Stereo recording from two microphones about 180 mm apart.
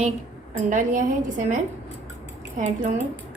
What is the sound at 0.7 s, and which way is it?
A woman's voice, 45° right (ahead or behind).